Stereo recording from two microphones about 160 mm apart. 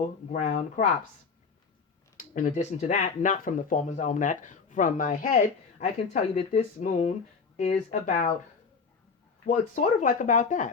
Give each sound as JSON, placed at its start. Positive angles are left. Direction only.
{"t": 0.0, "sound": "speech", "side_deg": 45}
{"t": 2.1, "sound": "speech", "side_deg": 55}
{"t": 9.5, "sound": "speech", "side_deg": 55}